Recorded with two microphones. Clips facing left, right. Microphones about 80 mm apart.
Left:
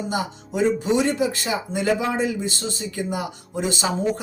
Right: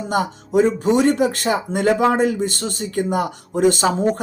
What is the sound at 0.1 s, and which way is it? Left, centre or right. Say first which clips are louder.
Speech: right 7 dB; right.